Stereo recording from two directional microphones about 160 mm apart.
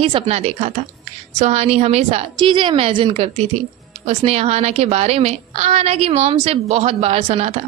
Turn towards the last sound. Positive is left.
turn(degrees=-40)  # may be behind; listen again after turning